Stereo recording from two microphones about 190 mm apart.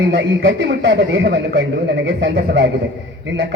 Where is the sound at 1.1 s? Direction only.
55° right (ahead or behind).